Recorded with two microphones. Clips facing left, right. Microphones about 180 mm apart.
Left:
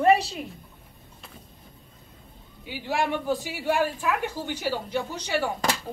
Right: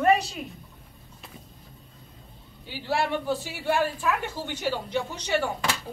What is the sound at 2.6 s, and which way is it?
A woman's voice, 15° left (ahead or behind).